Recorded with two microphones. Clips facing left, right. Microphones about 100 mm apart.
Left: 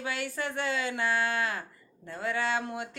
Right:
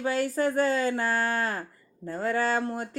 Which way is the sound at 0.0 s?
40° right (ahead or behind).